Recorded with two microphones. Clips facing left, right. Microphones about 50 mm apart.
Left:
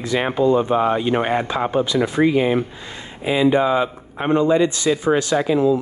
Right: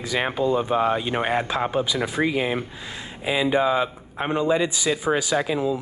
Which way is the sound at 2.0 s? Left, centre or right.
Left.